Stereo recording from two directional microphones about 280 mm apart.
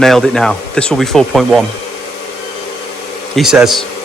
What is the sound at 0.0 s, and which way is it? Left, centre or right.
Speech, centre.